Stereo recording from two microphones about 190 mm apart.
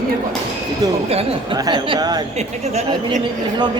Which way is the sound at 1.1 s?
25° right (ahead or behind).